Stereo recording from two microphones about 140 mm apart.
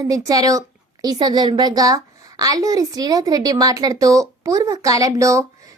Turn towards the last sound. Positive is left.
turn(degrees=-20)  # may be behind; listen again after turning